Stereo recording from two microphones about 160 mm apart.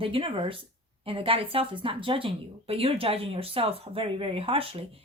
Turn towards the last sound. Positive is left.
turn(degrees=-35)  # may be behind; listen again after turning